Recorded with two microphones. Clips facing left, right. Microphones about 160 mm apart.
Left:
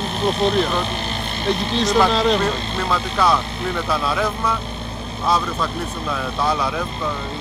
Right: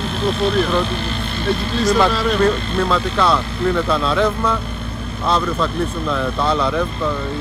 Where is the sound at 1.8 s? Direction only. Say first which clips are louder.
Right 1 dB; 20° left (ahead or behind).